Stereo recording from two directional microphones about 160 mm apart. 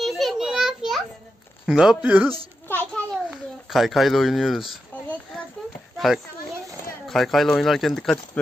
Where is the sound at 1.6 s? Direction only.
5° right (ahead or behind).